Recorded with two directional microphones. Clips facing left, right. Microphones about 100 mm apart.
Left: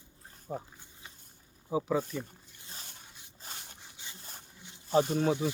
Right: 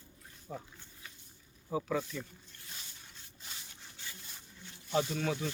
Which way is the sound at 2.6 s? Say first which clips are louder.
Left 3 dB; 35° left (ahead or behind).